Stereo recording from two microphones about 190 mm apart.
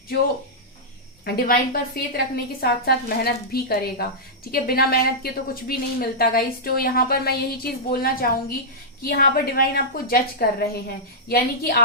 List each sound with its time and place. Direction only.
1.2 s a woman's voice: 50° left (ahead or behind)